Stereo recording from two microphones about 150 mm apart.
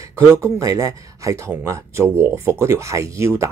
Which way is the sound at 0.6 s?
20° right (ahead or behind).